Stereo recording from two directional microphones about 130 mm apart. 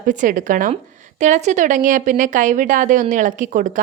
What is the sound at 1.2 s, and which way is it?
Speech, 65° right (ahead or behind).